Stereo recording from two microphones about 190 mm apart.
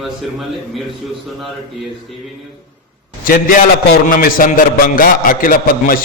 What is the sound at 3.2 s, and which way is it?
A man's voice, 45° left (ahead or behind).